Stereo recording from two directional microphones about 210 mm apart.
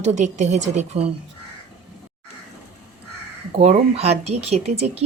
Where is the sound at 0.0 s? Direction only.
35° right (ahead or behind).